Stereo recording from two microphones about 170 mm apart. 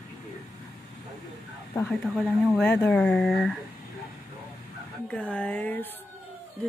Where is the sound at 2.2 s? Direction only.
5° left (ahead or behind).